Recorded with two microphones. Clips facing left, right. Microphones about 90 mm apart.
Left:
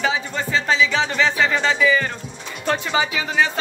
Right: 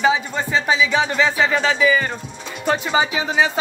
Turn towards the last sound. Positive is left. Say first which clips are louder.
# right 2 dB
turn(degrees=-15)  # may be behind; listen again after turning